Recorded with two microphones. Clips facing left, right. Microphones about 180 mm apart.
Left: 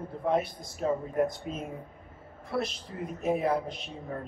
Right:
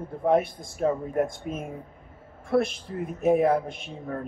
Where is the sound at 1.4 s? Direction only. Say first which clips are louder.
Right 3 dB; 10° right (ahead or behind).